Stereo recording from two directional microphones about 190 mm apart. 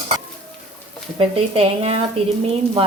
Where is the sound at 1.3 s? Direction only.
30° right (ahead or behind).